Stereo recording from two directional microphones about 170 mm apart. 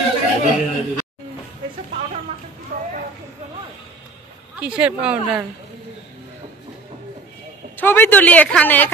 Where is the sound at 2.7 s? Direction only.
50° right (ahead or behind).